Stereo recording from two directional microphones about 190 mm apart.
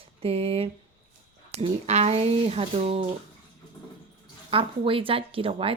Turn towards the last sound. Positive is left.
turn(degrees=-30)  # may be behind; listen again after turning